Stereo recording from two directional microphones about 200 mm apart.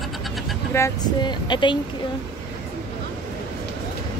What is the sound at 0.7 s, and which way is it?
Speech, 20° left (ahead or behind).